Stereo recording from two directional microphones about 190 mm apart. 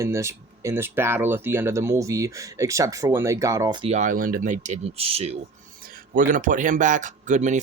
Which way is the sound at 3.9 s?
45° right (ahead or behind).